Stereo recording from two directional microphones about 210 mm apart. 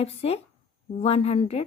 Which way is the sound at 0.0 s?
30° left (ahead or behind).